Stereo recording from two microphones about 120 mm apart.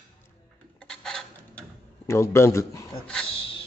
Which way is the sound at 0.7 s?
5° left (ahead or behind).